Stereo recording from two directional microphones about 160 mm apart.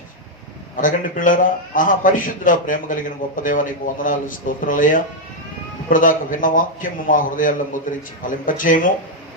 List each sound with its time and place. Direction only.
0.8 s a man's voice: 55° left (ahead or behind)